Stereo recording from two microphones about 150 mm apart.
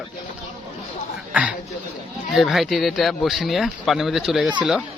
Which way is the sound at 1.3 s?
10° right (ahead or behind).